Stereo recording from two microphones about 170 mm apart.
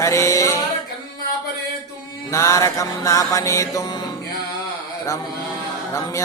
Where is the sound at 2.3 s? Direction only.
15° left (ahead or behind).